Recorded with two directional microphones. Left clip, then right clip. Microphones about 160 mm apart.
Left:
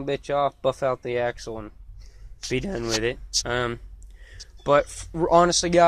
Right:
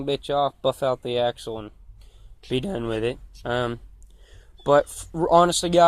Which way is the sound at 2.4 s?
50° right (ahead or behind).